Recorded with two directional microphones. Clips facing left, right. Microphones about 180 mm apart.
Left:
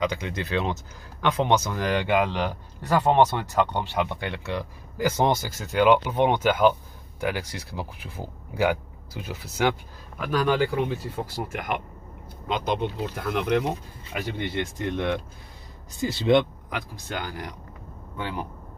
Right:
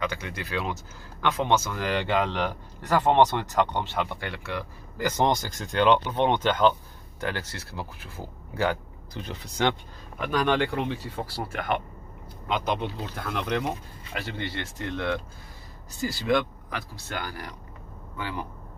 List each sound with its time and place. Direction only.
0.0 s speech: 15° left (ahead or behind)
11.3 s speech: 20° left (ahead or behind)
13.0 s speech: 10° left (ahead or behind)